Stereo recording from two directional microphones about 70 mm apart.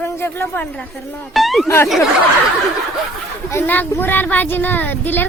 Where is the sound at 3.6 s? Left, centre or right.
Left.